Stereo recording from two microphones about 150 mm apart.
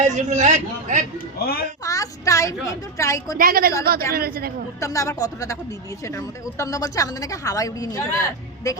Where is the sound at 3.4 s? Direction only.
75° right (ahead or behind).